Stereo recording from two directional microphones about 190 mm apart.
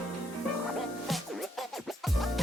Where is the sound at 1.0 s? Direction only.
Centre (ahead or behind).